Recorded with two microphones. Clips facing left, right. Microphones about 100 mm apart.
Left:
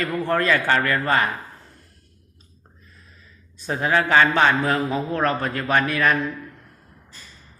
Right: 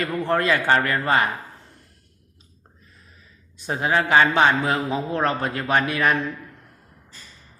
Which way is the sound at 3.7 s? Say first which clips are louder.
Even; 20° right (ahead or behind).